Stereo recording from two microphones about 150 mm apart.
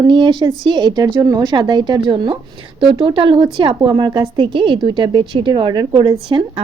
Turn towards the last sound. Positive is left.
turn(degrees=-30)  # may be behind; listen again after turning